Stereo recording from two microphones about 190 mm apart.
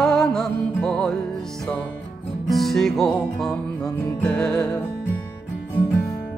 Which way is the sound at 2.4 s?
Centre (ahead or behind).